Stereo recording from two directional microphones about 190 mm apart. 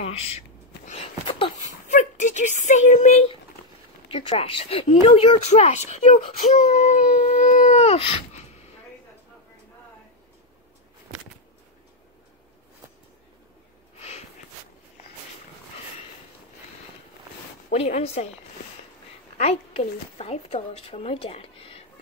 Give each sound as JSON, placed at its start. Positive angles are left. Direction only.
{"t": 0.0, "sound": "speech", "side_deg": 35}
{"t": 0.8, "sound": "a sound", "side_deg": 30}
{"t": 1.9, "sound": "a woman's voice", "side_deg": 40}
{"t": 13.9, "sound": "sniff", "side_deg": 35}
{"t": 17.7, "sound": "a woman's voice", "side_deg": 35}
{"t": 19.3, "sound": "a woman's voice", "side_deg": 35}